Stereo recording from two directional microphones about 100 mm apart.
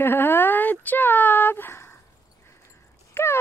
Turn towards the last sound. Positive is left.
turn(degrees=20)  # may be behind; listen again after turning